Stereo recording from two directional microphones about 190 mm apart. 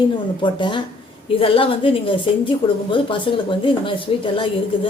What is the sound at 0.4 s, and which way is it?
A woman's voice, 25° left (ahead or behind).